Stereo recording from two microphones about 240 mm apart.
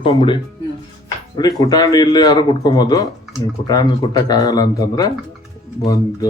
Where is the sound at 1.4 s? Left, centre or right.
Centre.